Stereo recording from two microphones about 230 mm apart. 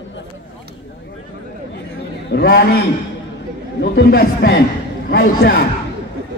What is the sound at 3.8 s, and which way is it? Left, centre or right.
A man's voice, left.